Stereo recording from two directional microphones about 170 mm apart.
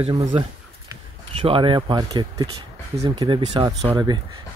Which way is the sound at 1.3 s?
30° right (ahead or behind).